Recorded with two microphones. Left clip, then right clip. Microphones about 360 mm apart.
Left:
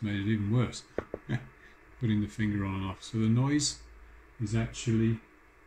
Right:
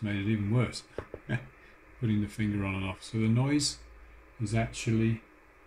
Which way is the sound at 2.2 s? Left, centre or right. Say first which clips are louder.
Even; centre.